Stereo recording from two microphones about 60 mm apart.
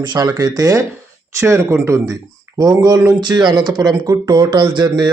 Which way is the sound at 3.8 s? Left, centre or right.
Right.